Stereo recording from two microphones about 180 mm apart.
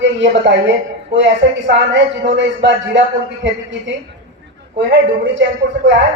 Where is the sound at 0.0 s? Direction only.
85° right.